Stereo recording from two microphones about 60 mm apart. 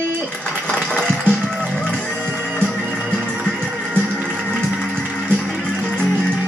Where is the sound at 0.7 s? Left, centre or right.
Right.